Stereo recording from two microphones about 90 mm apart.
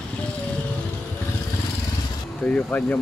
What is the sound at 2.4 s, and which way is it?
Speech, 15° left (ahead or behind).